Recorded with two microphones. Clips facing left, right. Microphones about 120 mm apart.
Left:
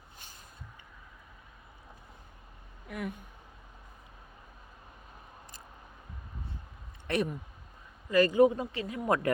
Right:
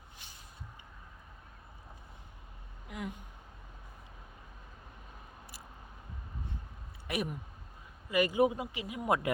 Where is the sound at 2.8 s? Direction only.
20° right (ahead or behind).